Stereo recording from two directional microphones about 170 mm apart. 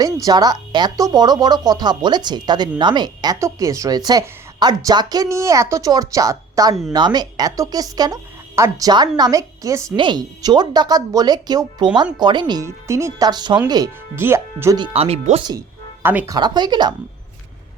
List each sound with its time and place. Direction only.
0.3 s speech: 25° right (ahead or behind)
14.8 s speech: 35° right (ahead or behind)
16.0 s speech: 15° right (ahead or behind)